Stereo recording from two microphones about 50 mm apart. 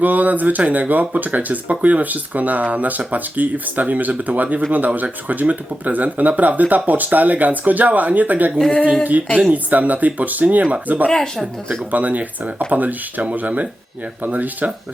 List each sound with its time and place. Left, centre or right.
0.0 s speech: right
8.5 s speech: centre
9.5 s speech: right
11.1 s speech: centre
11.9 s speech: right